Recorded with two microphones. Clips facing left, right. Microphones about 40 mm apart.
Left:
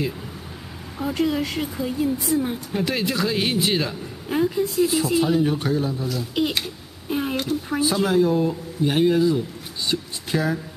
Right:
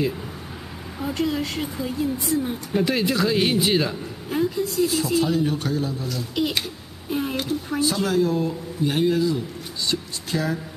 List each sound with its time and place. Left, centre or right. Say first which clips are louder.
0.9 s speech: left 2 dB; centre
2.7 s speech: right 4 dB; centre
4.3 s speech: left 2 dB; centre
6.0 s speech: left 1 dB; centre
7.8 s speech: left 2 dB; centre
9.8 s a sound: left 1 dB; centre